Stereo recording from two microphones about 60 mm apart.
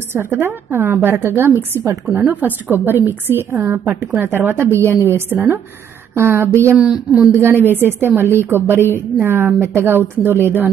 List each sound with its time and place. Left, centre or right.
0.1 s a woman's voice: right
3.9 s a woman's voice: right
6.8 s speech: centre
7.3 s a woman's voice: right